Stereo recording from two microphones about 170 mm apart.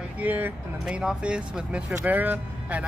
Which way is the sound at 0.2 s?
10° right (ahead or behind).